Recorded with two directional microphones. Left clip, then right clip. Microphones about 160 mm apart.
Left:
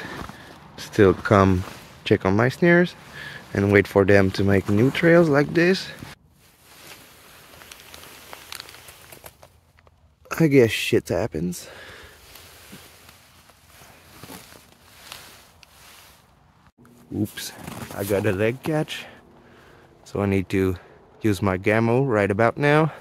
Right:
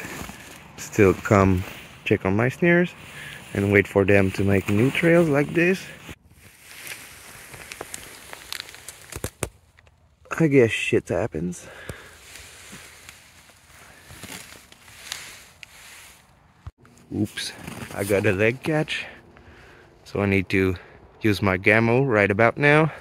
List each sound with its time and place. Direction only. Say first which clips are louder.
0.0 s a sound: left 1 dB; 5° right (ahead or behind)
0.9 s speech: left 1 dB; 5° right (ahead or behind)
10.2 s speech: left 1 dB; 20° left (ahead or behind)
17.2 s speech: right 1 dB; 5° left (ahead or behind)
17.9 s speech: right 1 dB; 5° right (ahead or behind); by 22.9 s 10° left (ahead or behind)